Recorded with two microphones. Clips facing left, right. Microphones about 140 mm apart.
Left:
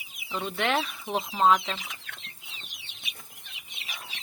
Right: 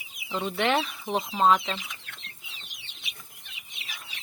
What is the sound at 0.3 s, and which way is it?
Speech, 15° right (ahead or behind).